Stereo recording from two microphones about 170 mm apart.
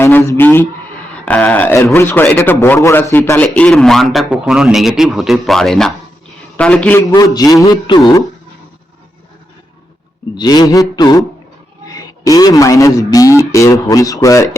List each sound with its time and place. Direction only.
0.0 s a man's voice: 15° left (ahead or behind)
7.3 s a man's voice: 20° left (ahead or behind)
10.3 s a man's voice: 25° left (ahead or behind)